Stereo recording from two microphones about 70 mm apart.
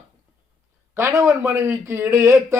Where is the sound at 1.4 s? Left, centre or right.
Right.